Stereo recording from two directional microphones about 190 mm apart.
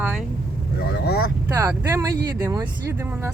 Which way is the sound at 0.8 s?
60° left (ahead or behind).